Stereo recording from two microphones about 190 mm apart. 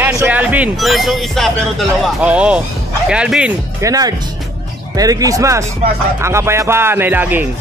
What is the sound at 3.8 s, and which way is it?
Speech, 20° right (ahead or behind).